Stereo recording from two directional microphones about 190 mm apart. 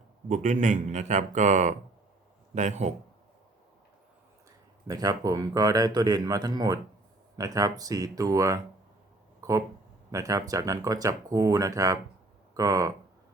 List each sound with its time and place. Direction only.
0.3 s a man's voice: 40° right (ahead or behind)
4.9 s a man's voice: 20° right (ahead or behind)